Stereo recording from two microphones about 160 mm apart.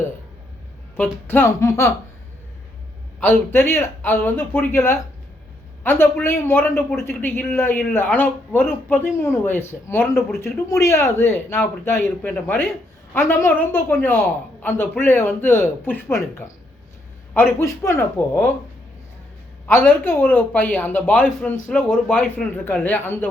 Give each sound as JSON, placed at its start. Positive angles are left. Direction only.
{"t": 1.3, "sound": "a man's voice", "side_deg": 15}
{"t": 3.2, "sound": "a man's voice", "side_deg": 15}
{"t": 17.6, "sound": "a man's voice", "side_deg": 15}
{"t": 19.6, "sound": "a man's voice", "side_deg": 10}